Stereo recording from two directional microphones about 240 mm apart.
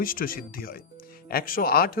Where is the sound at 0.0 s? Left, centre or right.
Left.